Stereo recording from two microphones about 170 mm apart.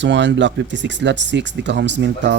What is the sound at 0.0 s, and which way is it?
Speech, 90° right.